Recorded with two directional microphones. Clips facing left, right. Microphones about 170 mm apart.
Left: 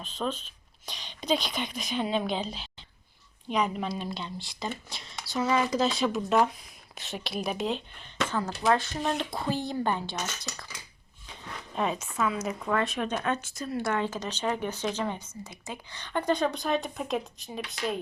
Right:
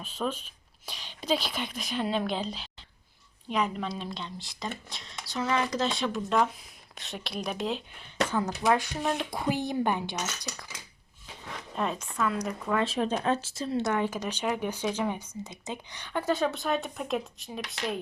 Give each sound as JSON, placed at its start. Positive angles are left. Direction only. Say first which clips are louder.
{"t": 0.0, "sound": "speech", "louder": "even", "side_deg": -10}
{"t": 8.3, "sound": "speech", "louder": "even", "side_deg": -15}
{"t": 11.7, "sound": "speech", "louder": "left 2 dB", "side_deg": 5}
{"t": 12.8, "sound": "speech", "louder": "right 2 dB", "side_deg": -30}
{"t": 13.9, "sound": "speech", "louder": "right 1 dB", "side_deg": -10}